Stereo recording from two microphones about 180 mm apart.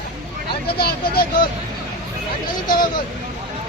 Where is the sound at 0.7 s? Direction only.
60° left (ahead or behind).